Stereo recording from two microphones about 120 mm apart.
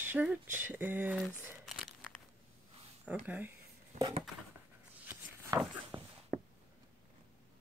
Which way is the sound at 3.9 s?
75° right (ahead or behind).